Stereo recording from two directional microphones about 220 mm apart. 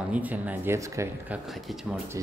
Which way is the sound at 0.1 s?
5° right (ahead or behind).